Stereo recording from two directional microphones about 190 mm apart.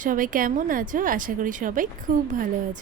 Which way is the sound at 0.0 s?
45° right (ahead or behind).